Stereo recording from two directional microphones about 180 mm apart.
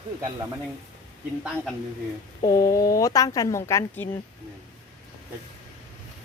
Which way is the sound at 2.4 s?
20° left (ahead or behind).